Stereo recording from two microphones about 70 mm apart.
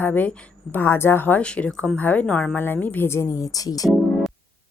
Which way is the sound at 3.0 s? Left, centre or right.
Left.